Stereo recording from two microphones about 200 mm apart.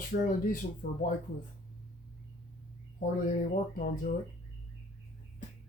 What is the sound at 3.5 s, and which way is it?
Speech, 40° left (ahead or behind).